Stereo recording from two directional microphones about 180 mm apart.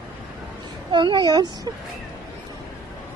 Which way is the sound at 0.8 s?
25° right (ahead or behind).